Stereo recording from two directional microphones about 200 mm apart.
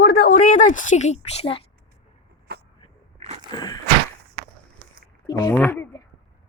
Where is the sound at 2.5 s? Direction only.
55° right (ahead or behind).